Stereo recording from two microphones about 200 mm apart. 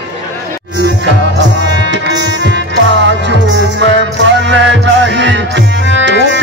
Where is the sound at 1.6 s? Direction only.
60° right (ahead or behind).